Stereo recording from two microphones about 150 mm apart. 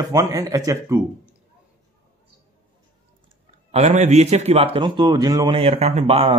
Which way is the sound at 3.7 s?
45° right (ahead or behind).